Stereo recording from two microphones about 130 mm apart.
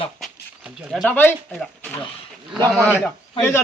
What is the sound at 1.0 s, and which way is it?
Speech, 10° left (ahead or behind).